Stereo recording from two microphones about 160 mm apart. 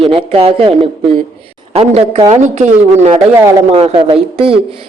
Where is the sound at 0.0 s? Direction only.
35° right (ahead or behind).